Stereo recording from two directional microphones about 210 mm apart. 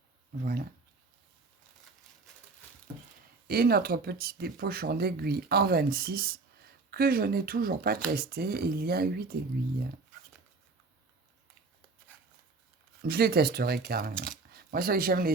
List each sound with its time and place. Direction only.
3.4 s speech: 45° right (ahead or behind)
13.0 s speech: 50° right (ahead or behind)